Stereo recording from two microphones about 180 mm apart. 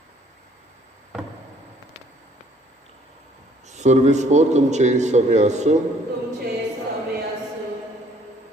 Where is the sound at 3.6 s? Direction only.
40° right (ahead or behind).